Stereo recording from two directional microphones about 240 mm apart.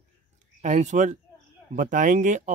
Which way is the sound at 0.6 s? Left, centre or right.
Right.